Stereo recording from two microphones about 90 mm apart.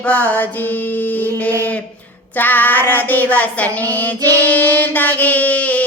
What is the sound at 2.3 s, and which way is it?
Child singing, 20° left (ahead or behind).